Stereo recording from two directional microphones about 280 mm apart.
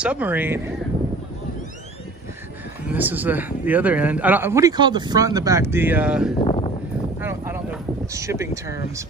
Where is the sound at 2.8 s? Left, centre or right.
Centre.